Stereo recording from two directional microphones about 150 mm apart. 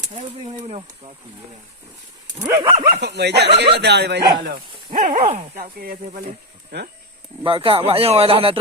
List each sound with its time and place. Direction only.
2.4 s dog: 20° right (ahead or behind)
3.0 s speech: 90° right
4.9 s speech: 55° right (ahead or behind)
5.5 s speech: 80° right
6.1 s speech: 60° right (ahead or behind)
7.4 s speech: 35° right (ahead or behind)